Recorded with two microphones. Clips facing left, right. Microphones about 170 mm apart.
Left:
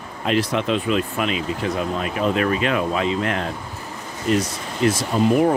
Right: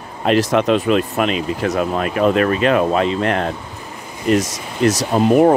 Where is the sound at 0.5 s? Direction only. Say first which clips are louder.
Right 6 dB; 70° right (ahead or behind); by 3.0 s 50° right (ahead or behind).